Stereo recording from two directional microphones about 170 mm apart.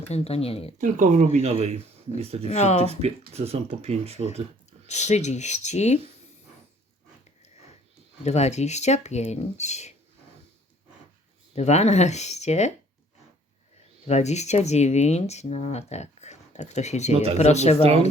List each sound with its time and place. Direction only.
0.1 s speech: 35° left (ahead or behind)
0.8 s speech: 50° right (ahead or behind)
2.5 s speech: 40° left (ahead or behind)
2.9 s speech: 35° right (ahead or behind)
4.9 s speech: 45° left (ahead or behind)
8.2 s speech: 40° left (ahead or behind)
11.5 s speech: 40° left (ahead or behind)
14.1 s speech: 40° left (ahead or behind)